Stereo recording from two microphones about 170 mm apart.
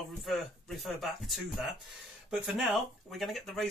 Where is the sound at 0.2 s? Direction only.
Centre (ahead or behind).